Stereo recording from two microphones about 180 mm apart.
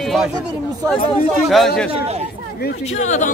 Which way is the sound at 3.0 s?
40° left (ahead or behind).